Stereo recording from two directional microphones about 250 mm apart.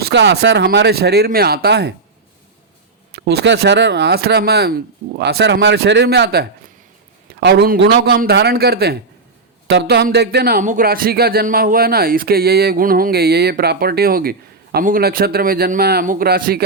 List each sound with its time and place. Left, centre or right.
0.0 s speech: right
3.1 s speech: right